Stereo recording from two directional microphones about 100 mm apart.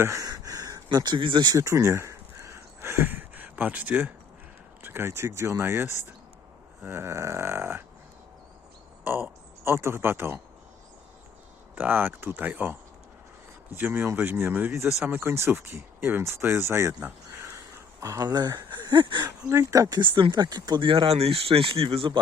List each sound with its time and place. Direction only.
0.0 s a sound: 35° right (ahead or behind); by 1.5 s 50° right (ahead or behind)
1.5 s a sound: 30° right (ahead or behind)
4.8 s speech: 20° right (ahead or behind)
9.0 s speech: 25° right (ahead or behind)
11.7 s speech: 20° right (ahead or behind)
18.0 s speech: 35° right (ahead or behind)
19.5 s speech: 35° right (ahead or behind)
20.0 s speech: 50° right (ahead or behind)